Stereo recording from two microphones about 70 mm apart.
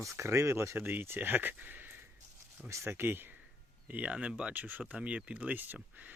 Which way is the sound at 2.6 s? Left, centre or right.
Right.